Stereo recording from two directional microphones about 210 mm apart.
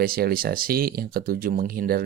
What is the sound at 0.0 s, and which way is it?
Speech, 45° right (ahead or behind).